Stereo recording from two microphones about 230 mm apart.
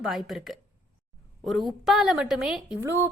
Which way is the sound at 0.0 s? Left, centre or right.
Centre.